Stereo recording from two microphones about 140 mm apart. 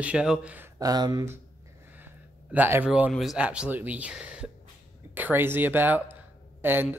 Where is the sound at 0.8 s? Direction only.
25° right (ahead or behind).